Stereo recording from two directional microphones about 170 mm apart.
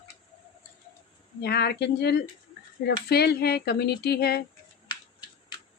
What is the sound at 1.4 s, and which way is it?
Speech, 70° left (ahead or behind).